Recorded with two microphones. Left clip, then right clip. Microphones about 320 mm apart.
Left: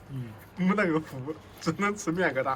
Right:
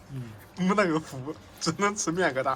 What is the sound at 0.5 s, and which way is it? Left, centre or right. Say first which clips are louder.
Speech: right 2 dB; centre.